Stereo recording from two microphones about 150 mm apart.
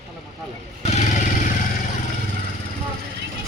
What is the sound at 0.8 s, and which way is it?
Motorcycle, 50° left (ahead or behind).